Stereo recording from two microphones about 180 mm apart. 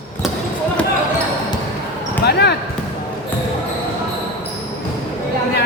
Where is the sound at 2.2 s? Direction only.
65° left (ahead or behind).